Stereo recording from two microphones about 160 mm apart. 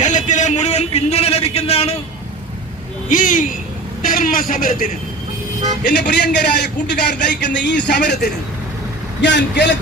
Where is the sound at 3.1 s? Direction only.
55° left (ahead or behind).